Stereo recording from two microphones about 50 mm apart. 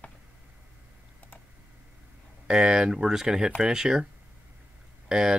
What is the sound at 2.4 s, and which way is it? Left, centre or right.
Speech, centre.